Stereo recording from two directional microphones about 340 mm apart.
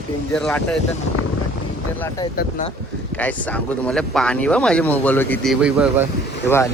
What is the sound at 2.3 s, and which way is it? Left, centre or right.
Speech, left.